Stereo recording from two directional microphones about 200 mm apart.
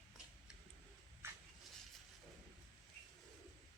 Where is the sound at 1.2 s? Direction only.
10° right (ahead or behind).